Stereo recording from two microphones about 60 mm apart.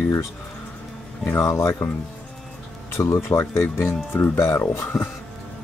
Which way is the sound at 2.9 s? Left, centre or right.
Left.